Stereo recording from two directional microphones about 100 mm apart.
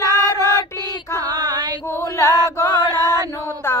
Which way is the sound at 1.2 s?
40° right (ahead or behind).